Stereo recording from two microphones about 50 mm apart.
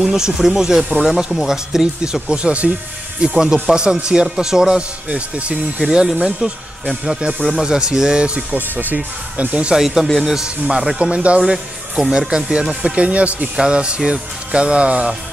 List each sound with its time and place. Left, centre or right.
0.0 s speech: centre; by 2.7 s right
3.3 s speech: centre
8.5 s speech: right
9.7 s speech: centre
12.9 s speech: right